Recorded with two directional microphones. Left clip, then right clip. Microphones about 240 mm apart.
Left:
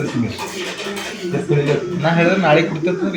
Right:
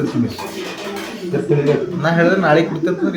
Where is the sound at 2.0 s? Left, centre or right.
Centre.